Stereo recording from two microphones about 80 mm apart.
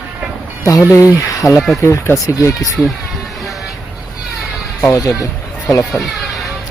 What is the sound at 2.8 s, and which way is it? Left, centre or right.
Speech, left.